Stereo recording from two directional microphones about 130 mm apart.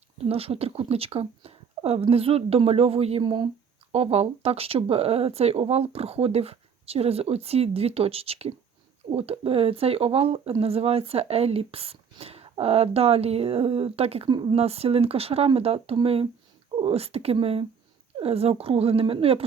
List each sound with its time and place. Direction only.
0.3 s speech: 50° right (ahead or behind)
3.9 s speech: 55° right (ahead or behind)
14.3 s speech: 35° right (ahead or behind)
14.5 s speech: 50° right (ahead or behind)